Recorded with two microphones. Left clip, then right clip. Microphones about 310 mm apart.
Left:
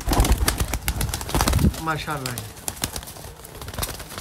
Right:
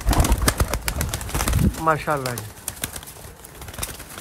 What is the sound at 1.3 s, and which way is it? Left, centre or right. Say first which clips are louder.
Bird: left 4 dB; left.